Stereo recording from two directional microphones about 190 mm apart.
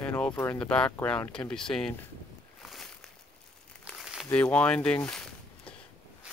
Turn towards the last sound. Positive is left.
turn(degrees=5)  # may be behind; listen again after turning